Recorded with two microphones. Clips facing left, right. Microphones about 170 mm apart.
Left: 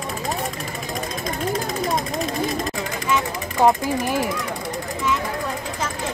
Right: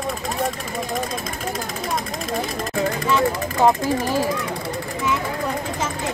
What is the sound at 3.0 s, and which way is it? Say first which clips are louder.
Speech: right 1 dB; 15° left (ahead or behind).